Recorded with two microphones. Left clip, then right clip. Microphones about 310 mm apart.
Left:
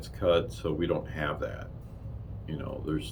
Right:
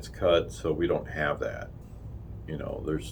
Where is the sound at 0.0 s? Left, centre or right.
Centre.